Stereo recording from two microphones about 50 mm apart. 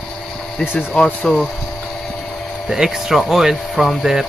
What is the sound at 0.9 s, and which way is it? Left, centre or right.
Speech, centre.